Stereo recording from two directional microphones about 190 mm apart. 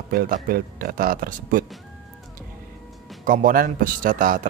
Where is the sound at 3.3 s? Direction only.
45° right (ahead or behind).